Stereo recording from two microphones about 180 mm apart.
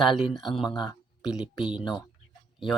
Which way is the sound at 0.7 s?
25° left (ahead or behind).